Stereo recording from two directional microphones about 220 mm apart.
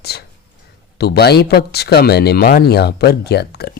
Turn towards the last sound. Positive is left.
turn(degrees=45)  # may be behind; listen again after turning